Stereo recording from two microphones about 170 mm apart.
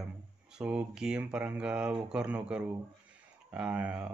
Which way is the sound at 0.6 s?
5° right (ahead or behind).